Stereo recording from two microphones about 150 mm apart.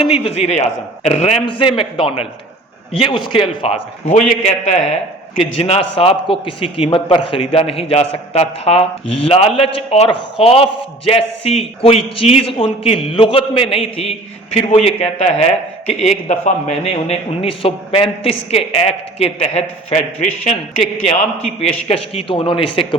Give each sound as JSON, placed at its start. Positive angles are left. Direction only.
{"t": 0.2, "sound": "a man's voice", "side_deg": 45}
{"t": 1.5, "sound": "a man's voice", "side_deg": 35}